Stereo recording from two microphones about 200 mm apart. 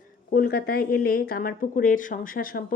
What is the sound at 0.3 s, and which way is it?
Speech, 45° left (ahead or behind).